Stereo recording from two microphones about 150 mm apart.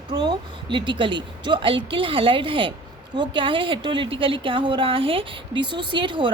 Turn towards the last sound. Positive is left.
turn(degrees=-35)  # may be behind; listen again after turning